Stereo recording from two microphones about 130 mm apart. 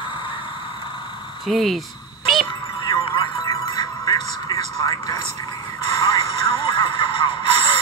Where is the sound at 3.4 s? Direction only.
30° left (ahead or behind).